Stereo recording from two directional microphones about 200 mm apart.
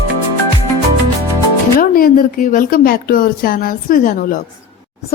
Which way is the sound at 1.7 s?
45° left (ahead or behind).